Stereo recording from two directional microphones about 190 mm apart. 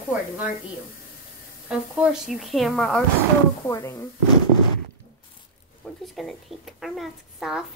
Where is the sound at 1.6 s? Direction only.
5° right (ahead or behind).